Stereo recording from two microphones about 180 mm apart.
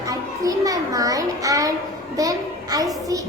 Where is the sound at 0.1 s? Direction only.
20° right (ahead or behind).